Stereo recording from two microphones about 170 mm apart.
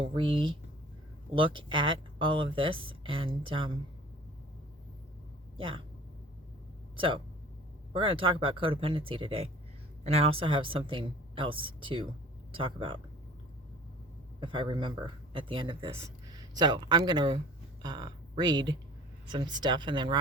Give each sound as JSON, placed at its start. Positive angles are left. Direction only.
{"t": 0.0, "sound": "speech", "side_deg": -30}
{"t": 5.5, "sound": "speech", "side_deg": -30}
{"t": 6.9, "sound": "speech", "side_deg": -30}
{"t": 14.4, "sound": "speech", "side_deg": -30}